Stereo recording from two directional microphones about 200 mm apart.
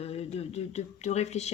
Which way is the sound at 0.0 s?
30° left (ahead or behind).